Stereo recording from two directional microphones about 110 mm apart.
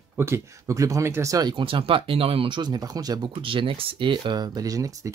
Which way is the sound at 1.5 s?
55° right (ahead or behind).